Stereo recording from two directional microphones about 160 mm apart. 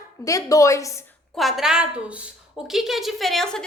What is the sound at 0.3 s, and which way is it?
Speech, 20° left (ahead or behind).